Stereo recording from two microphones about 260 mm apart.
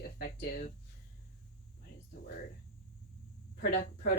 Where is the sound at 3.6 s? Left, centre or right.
Left.